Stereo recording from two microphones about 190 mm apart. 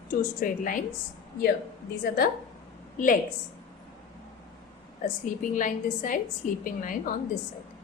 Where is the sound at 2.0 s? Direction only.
50° left (ahead or behind).